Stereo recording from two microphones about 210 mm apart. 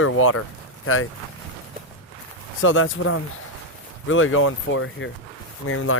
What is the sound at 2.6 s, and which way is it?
Speech, 70° left (ahead or behind).